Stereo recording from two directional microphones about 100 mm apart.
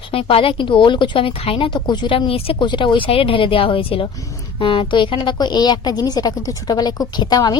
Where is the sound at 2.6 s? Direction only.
50° left (ahead or behind).